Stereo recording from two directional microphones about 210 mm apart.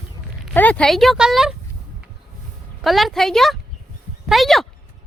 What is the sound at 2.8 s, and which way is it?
Speech, centre (ahead or behind).